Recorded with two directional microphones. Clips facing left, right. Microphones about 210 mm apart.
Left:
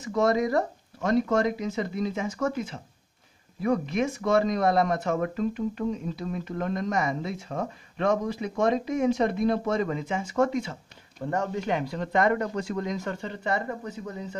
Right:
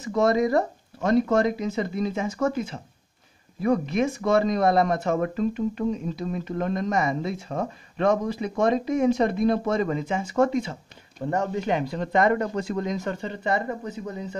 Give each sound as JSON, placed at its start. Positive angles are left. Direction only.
{"t": 0.0, "sound": "speech", "side_deg": -30}